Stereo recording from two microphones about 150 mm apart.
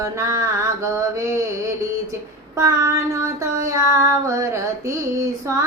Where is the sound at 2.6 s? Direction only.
20° right (ahead or behind).